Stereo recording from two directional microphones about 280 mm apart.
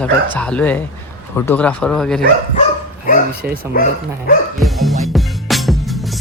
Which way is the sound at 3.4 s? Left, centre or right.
Centre.